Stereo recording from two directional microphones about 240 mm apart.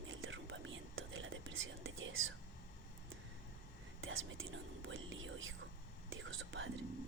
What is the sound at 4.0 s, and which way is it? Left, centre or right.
Speech, right.